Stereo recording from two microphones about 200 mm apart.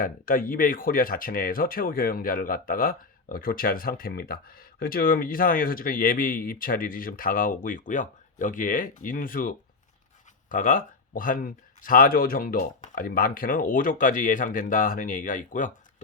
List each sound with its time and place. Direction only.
0.0 s speech: 45° left (ahead or behind)